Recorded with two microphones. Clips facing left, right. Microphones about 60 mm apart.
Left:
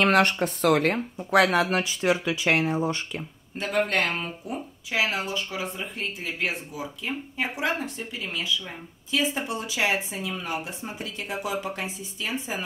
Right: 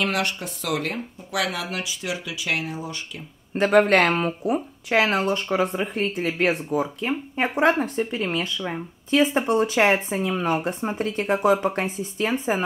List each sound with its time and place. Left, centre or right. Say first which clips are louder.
0.0 s speech: left 5 dB; left
3.5 s speech: right 8 dB; right